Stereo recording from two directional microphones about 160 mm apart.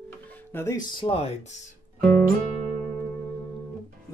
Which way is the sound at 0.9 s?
35° left (ahead or behind).